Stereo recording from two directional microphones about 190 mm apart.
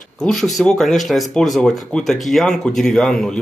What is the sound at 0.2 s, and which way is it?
Speech, centre (ahead or behind).